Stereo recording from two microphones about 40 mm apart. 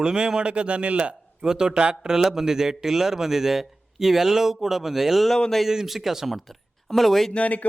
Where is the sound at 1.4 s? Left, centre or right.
Centre.